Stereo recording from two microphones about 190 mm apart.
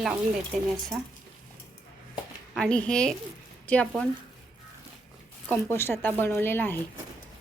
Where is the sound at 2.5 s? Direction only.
5° left (ahead or behind).